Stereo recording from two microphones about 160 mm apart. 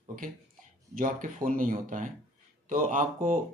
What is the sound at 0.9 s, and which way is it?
Speech, 60° right (ahead or behind).